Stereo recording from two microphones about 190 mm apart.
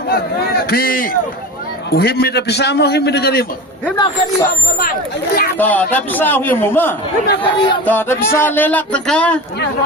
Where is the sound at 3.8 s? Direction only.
20° left (ahead or behind).